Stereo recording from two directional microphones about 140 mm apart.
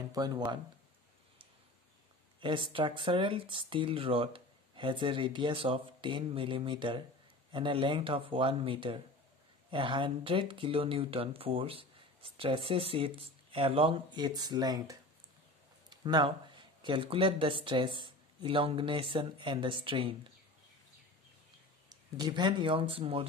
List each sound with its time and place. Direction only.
0.1 s speech: 30° right (ahead or behind)
2.4 s speech: 35° right (ahead or behind)
21.8 s speech: 30° right (ahead or behind)